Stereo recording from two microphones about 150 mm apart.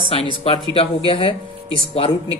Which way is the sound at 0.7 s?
40° left (ahead or behind).